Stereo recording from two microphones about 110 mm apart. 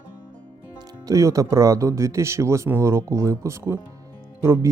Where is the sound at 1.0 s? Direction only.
30° right (ahead or behind).